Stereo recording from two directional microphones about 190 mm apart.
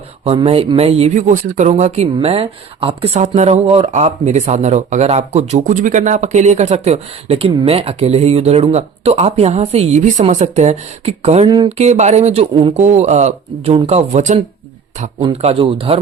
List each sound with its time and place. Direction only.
0.3 s speech: 30° right (ahead or behind)
11.8 s speech: 35° right (ahead or behind)